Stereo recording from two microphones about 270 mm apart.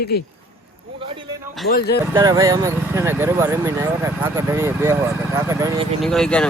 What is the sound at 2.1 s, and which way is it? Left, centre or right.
Speech, centre.